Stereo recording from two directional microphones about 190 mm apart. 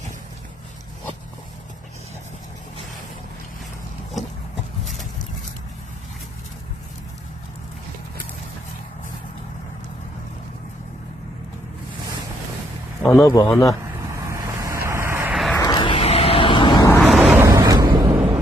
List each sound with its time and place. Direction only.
13.2 s a man's voice: 20° left (ahead or behind)
14.3 s vehicle: 15° right (ahead or behind)
15.5 s vehicle: 20° left (ahead or behind)
17.0 s vehicle: centre (ahead or behind)
17.3 s a sound: 15° right (ahead or behind)